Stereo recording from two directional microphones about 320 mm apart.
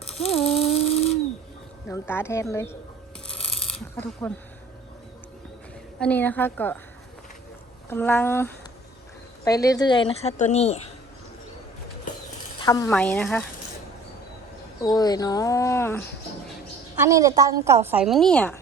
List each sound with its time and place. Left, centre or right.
0.2 s a sound: centre
1.9 s a woman's voice: centre
3.5 s a sound: left
4.2 s a woman's voice: centre
6.0 s a woman's voice: centre
7.9 s a woman's voice: centre
12.5 s a woman's voice: centre
14.9 s a woman's voice: centre
16.9 s a woman's voice: centre